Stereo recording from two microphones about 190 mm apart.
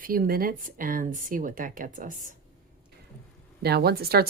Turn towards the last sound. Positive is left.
turn(degrees=-55)  # may be behind; listen again after turning